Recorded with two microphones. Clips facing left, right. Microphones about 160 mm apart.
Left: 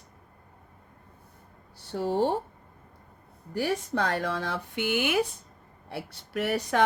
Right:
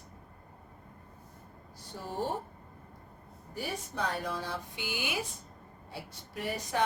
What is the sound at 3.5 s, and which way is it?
Child singing, 75° left (ahead or behind).